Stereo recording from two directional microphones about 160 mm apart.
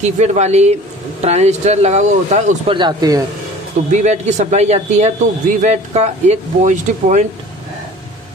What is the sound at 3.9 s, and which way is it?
Speech, 50° right (ahead or behind).